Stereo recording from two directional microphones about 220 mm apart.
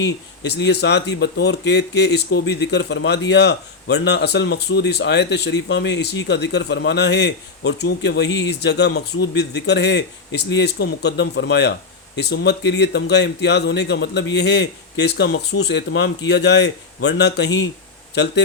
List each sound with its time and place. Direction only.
0.0 s speech: 50° left (ahead or behind)